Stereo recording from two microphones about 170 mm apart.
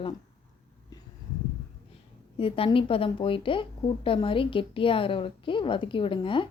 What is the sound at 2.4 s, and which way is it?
Speech, 35° left (ahead or behind).